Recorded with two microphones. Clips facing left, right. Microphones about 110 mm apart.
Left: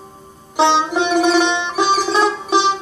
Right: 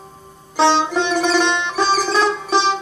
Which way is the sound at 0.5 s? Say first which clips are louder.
Left 1 dB; 15° left (ahead or behind).